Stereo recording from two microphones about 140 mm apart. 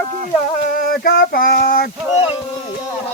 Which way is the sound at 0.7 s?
90° left.